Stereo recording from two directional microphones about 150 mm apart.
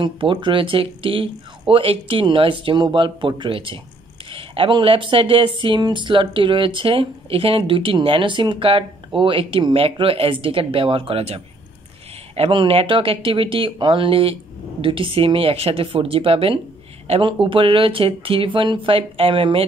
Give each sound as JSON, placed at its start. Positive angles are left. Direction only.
{"t": 0.0, "sound": "speech", "side_deg": -35}